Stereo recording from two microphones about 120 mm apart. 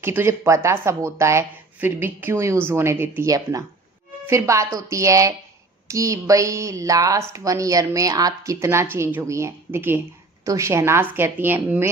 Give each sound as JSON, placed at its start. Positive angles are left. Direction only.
{"t": 0.0, "sound": "speech", "side_deg": -20}